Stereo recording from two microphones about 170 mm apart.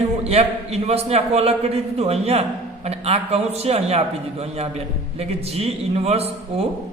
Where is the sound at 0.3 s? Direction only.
40° right (ahead or behind).